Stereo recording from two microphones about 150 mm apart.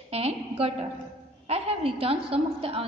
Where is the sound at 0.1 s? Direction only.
40° right (ahead or behind).